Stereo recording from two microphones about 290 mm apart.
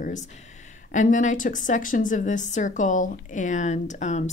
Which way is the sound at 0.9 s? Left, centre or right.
Left.